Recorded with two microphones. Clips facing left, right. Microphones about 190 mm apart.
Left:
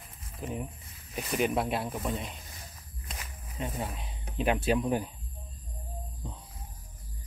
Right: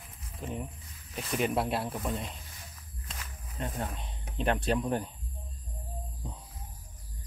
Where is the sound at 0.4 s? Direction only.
5° left (ahead or behind).